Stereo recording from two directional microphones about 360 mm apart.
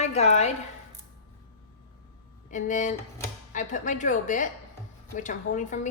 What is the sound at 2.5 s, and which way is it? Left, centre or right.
A woman's voice, left.